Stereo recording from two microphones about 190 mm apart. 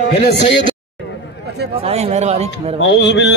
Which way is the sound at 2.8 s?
70° left (ahead or behind).